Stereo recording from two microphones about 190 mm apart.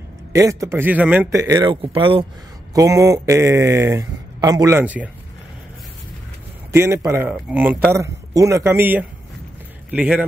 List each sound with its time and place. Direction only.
0.3 s speech: 15° right (ahead or behind)
2.7 s speech: 15° right (ahead or behind)
6.7 s a man's voice: 15° right (ahead or behind)